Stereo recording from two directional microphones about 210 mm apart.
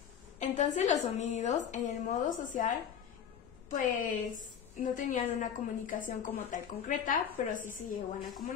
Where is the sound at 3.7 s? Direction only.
40° left (ahead or behind).